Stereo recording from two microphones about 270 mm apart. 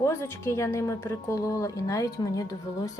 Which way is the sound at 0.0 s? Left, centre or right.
Centre.